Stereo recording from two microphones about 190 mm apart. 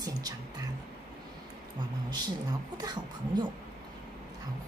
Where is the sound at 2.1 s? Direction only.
20° right (ahead or behind).